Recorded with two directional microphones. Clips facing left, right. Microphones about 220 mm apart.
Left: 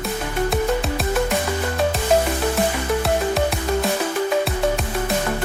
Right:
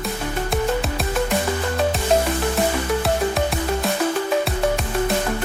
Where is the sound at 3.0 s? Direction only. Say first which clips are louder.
Left 1 dB; centre (ahead or behind).